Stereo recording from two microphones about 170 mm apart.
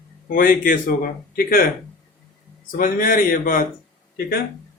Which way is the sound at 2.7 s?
55° left (ahead or behind).